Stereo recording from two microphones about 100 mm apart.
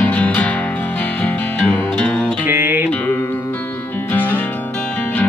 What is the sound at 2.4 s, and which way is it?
Music, 20° right (ahead or behind).